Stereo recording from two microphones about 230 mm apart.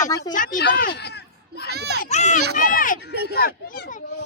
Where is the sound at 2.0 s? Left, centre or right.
Left.